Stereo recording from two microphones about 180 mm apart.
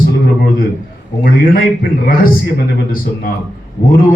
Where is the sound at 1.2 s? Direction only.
60° left (ahead or behind).